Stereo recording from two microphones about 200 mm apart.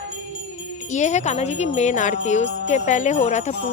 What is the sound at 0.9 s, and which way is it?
A woman's voice, 35° left (ahead or behind).